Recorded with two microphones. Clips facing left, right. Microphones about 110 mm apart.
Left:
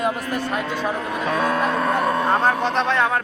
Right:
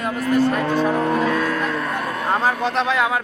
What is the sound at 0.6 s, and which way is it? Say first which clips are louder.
Cattle: right 5 dB; 35° right (ahead or behind).